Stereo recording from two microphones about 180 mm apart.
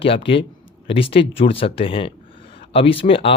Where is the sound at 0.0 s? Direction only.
30° left (ahead or behind).